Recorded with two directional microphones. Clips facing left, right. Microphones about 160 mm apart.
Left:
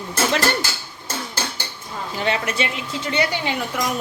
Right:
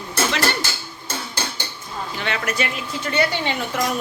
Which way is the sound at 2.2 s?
30° left (ahead or behind).